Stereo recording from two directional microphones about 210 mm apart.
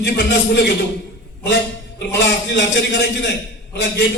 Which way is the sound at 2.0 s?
55° left (ahead or behind).